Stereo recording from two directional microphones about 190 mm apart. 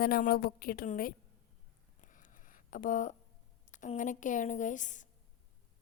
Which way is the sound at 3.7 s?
40° left (ahead or behind).